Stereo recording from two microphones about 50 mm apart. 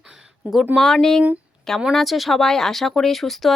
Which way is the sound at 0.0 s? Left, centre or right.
Centre.